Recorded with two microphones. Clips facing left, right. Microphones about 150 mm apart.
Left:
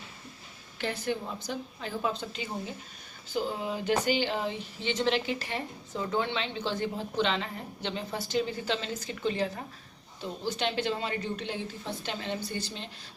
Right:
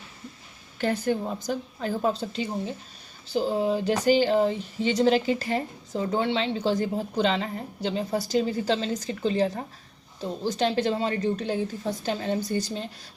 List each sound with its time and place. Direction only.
0.8 s speech: 45° right (ahead or behind)